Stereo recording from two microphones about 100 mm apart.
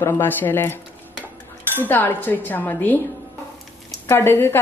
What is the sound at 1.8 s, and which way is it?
Speech, 20° left (ahead or behind).